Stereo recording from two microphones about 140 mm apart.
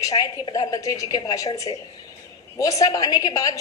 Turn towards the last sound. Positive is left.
turn(degrees=25)  # may be behind; listen again after turning